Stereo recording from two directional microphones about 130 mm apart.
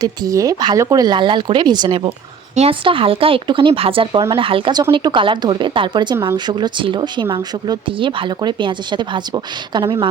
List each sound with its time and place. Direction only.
0.0 s speech: 25° right (ahead or behind)